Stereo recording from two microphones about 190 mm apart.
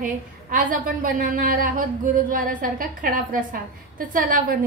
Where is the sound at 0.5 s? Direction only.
45° right (ahead or behind).